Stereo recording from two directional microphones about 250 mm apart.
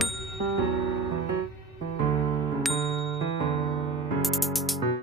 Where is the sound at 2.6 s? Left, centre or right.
Centre.